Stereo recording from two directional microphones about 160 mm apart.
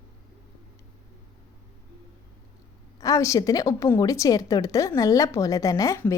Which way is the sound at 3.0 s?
20° left (ahead or behind).